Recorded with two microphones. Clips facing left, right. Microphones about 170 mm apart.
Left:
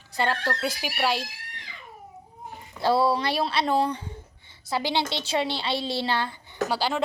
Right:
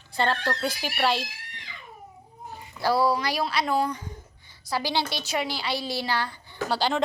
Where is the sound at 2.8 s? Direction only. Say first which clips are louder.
Left 1 dB; 25° left (ahead or behind).